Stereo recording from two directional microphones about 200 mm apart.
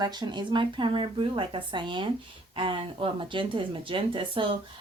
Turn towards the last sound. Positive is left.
turn(degrees=-25)  # may be behind; listen again after turning